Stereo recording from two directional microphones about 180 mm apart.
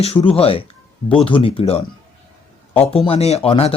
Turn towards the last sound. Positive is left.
turn(degrees=35)  # may be behind; listen again after turning